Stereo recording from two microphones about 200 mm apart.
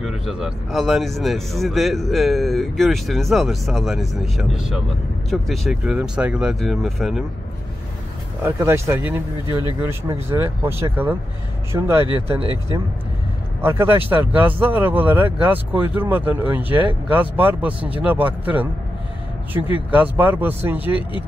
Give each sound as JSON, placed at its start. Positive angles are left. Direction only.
{"t": 0.0, "sound": "speech", "side_deg": 0}
{"t": 8.4, "sound": "speech", "side_deg": -10}
{"t": 13.6, "sound": "speech", "side_deg": -10}